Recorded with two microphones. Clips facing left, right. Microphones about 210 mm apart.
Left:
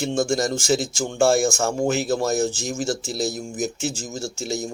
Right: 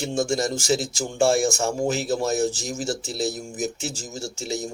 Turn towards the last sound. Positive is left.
turn(degrees=0)  # may be behind; listen again after turning